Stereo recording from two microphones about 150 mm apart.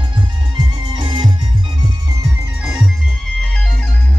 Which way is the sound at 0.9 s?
30° right (ahead or behind).